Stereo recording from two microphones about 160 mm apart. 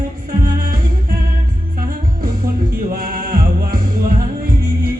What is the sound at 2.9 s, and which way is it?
Music, 65° right (ahead or behind).